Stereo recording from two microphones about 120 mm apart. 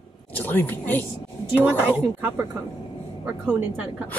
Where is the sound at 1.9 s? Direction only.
15° right (ahead or behind).